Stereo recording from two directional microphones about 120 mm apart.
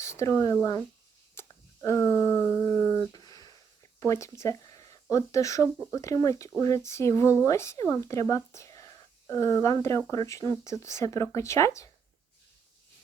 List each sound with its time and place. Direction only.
0.0 s speech: 25° left (ahead or behind)
3.1 s a sound: 30° left (ahead or behind)
4.0 s speech: 25° left (ahead or behind)